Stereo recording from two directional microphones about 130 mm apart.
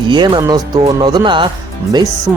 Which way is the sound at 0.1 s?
35° right (ahead or behind).